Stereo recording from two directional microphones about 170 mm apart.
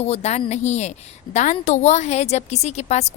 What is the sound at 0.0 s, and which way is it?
A woman's voice, 40° left (ahead or behind).